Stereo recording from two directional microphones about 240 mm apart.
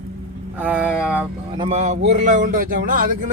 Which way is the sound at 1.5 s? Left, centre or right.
Right.